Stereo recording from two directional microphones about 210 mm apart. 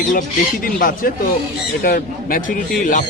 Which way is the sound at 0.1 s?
40° left (ahead or behind).